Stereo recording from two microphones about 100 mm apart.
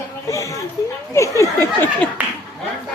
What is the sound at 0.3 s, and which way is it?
Speech, 30° left (ahead or behind).